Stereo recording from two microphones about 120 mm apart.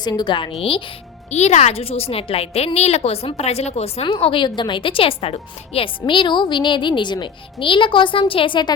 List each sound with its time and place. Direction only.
0.0 s a woman's voice: 35° left (ahead or behind)
1.3 s a woman's voice: 65° left (ahead or behind); by 8.7 s 40° left (ahead or behind)